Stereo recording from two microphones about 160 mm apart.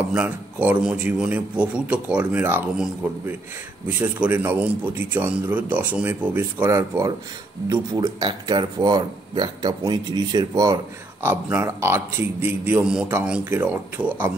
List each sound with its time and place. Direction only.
0.1 s speech: 10° right (ahead or behind)